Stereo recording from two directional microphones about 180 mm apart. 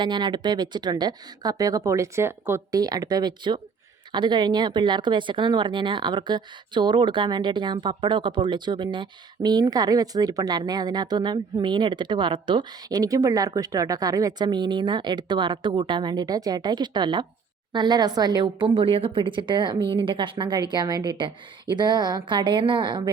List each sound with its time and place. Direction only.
0.0 s speech: 25° right (ahead or behind)